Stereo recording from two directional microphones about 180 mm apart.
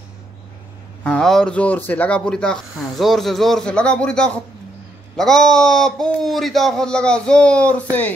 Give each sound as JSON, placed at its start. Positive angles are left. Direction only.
{"t": 1.0, "sound": "speech", "side_deg": 5}